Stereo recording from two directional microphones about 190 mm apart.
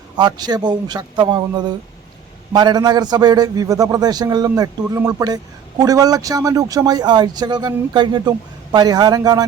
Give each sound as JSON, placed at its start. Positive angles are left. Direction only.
{"t": 0.2, "sound": "a man's voice", "side_deg": -20}